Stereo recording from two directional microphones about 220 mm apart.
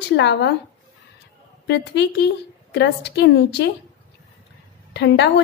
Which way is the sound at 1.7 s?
50° left (ahead or behind).